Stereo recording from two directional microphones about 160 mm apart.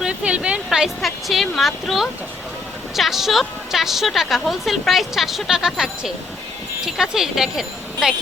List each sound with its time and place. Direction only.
0.0 s a woman's voice: 5° right (ahead or behind)